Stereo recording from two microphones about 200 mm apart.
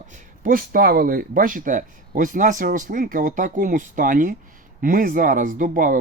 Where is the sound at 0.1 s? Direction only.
45° right (ahead or behind).